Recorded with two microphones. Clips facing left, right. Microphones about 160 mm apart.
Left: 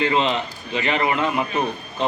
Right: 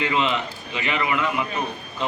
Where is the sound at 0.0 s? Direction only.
35° left (ahead or behind).